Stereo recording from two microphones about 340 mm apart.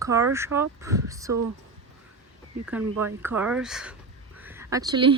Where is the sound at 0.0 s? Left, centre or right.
Centre.